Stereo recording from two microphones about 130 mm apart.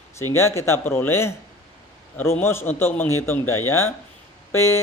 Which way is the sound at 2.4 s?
20° left (ahead or behind).